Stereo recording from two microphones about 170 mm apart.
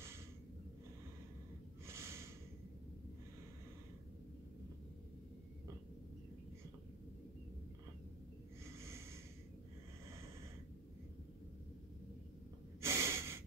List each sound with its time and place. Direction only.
1.9 s snort: 15° right (ahead or behind)
8.8 s snort: 15° right (ahead or behind)
12.8 s snort: 15° right (ahead or behind)